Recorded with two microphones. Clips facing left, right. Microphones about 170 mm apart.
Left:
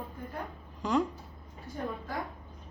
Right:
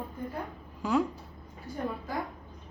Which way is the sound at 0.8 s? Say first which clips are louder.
Right 1 dB; 5° right (ahead or behind).